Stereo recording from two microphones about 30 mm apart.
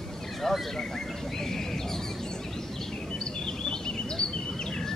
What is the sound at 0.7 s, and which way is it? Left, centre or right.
Bird, centre.